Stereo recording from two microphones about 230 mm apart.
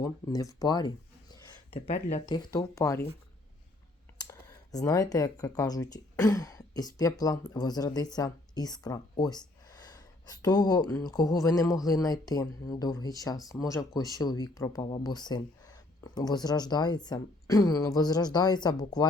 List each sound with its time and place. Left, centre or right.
0.0 s speech: centre
1.7 s speech: left
2.2 s speech: centre
4.3 s speech: centre